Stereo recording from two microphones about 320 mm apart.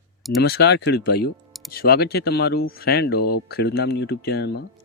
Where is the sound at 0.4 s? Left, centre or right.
Left.